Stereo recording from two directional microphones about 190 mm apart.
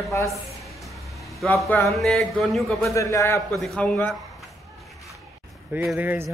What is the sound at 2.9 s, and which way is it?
Speech, 15° left (ahead or behind).